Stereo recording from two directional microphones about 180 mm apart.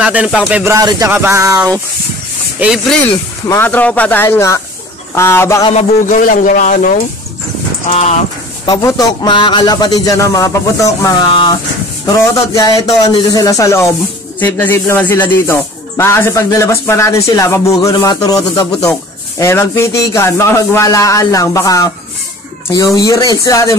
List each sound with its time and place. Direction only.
0.0 s speech: 5° right (ahead or behind)
0.5 s music: 10° right (ahead or behind)
0.7 s music: 20° right (ahead or behind)
2.6 s speech: centre (ahead or behind)
3.4 s speech: 10° left (ahead or behind)
5.7 s speech: 40° left (ahead or behind)
7.9 s speech: 40° left (ahead or behind)
8.6 s a man's voice: 20° left (ahead or behind)
22.9 s a man's voice: 20° left (ahead or behind)